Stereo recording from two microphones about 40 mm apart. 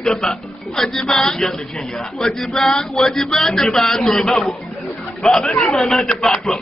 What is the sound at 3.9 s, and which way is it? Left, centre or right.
A man's voice, left.